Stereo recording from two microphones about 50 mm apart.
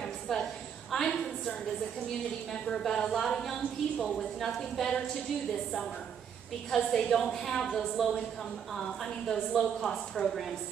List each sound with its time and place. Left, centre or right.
0.0 s a sound: centre
0.9 s a woman's voice: centre
2.5 s a woman's voice: centre
6.7 s a woman's voice: centre